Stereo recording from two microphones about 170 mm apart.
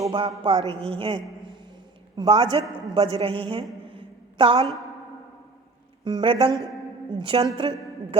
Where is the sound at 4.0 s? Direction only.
30° right (ahead or behind).